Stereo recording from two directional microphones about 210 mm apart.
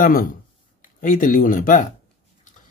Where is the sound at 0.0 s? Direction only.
40° left (ahead or behind).